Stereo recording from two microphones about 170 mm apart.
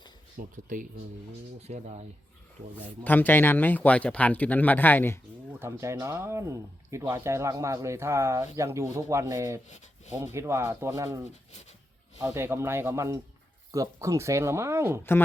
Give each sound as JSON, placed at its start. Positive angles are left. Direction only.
{"t": 0.3, "sound": "speech", "side_deg": -50}
{"t": 1.6, "sound": "speech", "side_deg": -40}
{"t": 3.0, "sound": "speech", "side_deg": 10}
{"t": 5.5, "sound": "speech", "side_deg": -15}